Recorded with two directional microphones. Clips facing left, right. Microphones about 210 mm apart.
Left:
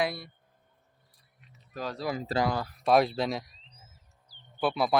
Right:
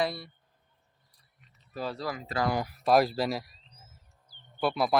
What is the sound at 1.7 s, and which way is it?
Speech, 10° right (ahead or behind).